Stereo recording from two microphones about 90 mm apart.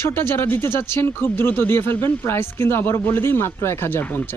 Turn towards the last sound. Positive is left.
turn(degrees=20)  # may be behind; listen again after turning